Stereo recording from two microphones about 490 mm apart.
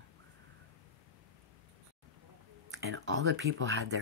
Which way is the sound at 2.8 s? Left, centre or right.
Right.